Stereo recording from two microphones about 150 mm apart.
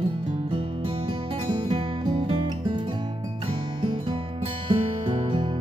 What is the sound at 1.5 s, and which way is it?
Music, 35° right (ahead or behind).